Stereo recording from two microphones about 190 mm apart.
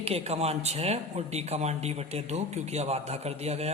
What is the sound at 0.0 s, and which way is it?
A man's voice, 35° right (ahead or behind).